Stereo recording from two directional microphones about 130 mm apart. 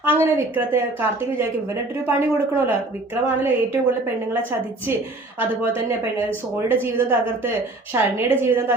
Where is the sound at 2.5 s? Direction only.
15° right (ahead or behind).